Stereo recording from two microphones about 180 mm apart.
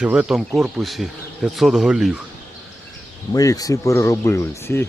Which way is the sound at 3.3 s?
20° left (ahead or behind).